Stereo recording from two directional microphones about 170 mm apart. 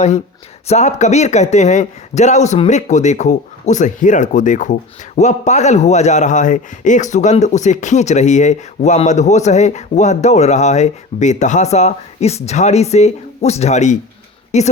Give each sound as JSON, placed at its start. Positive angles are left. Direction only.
{"t": 0.7, "sound": "speech", "side_deg": 45}